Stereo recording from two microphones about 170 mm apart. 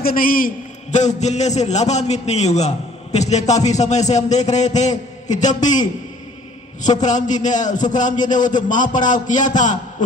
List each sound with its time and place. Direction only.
0.0 s a man's voice: 60° left (ahead or behind)
0.9 s a man's voice: 40° left (ahead or behind)